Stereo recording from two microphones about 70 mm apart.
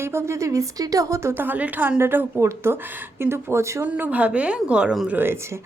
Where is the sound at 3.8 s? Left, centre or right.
Right.